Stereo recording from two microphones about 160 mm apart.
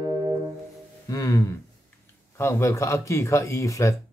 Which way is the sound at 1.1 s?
20° left (ahead or behind).